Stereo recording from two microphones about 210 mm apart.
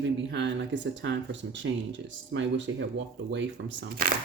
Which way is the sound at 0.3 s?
60° right (ahead or behind).